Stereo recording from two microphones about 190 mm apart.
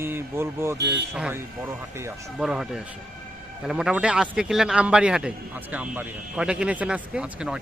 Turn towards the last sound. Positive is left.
turn(degrees=-5)  # may be behind; listen again after turning